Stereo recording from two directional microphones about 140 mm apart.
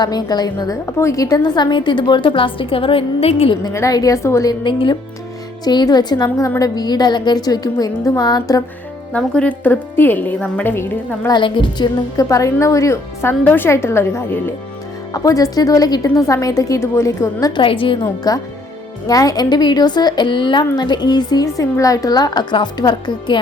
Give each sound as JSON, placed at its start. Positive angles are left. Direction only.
{"t": 0.0, "sound": "a woman's voice", "side_deg": 30}
{"t": 3.6, "sound": "a woman's voice", "side_deg": 25}
{"t": 4.6, "sound": "a woman's voice", "side_deg": 35}
{"t": 9.1, "sound": "a woman's voice", "side_deg": 10}
{"t": 11.3, "sound": "a woman's voice", "side_deg": 35}
{"t": 17.6, "sound": "a woman's voice", "side_deg": 40}
{"t": 18.0, "sound": "a woman's voice", "side_deg": 25}